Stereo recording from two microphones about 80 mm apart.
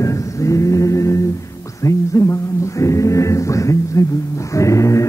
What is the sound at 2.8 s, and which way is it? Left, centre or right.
Mantra, left.